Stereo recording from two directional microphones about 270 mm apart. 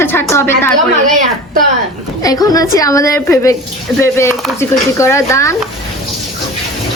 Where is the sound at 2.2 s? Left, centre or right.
Centre.